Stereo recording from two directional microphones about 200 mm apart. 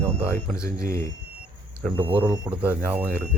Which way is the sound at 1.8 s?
5° left (ahead or behind).